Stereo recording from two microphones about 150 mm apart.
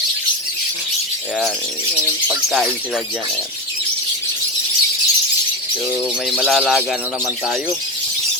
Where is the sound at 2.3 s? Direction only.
Centre (ahead or behind).